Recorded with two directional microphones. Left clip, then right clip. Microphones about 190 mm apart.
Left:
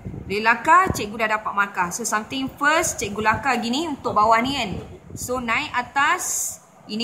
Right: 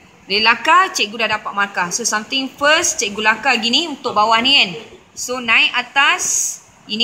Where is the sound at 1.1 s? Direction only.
35° right (ahead or behind).